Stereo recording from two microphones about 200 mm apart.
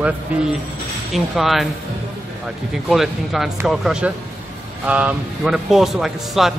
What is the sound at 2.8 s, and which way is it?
A man's voice, centre (ahead or behind).